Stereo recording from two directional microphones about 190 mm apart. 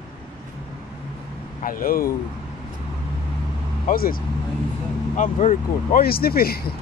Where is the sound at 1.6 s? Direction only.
45° left (ahead or behind).